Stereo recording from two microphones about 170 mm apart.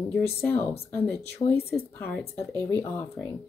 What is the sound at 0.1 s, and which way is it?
Speech, 15° left (ahead or behind).